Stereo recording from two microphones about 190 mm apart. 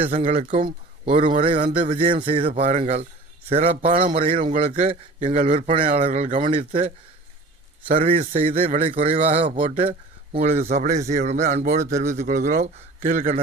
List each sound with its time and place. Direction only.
0.3 s a man's voice: 35° right (ahead or behind)
8.0 s a man's voice: 35° right (ahead or behind)